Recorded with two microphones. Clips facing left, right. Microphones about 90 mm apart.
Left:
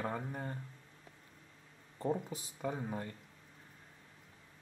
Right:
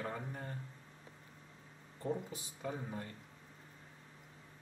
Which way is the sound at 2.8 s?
25° left (ahead or behind).